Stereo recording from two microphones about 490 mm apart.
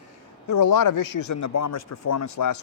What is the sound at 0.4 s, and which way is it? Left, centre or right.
A man's voice, left.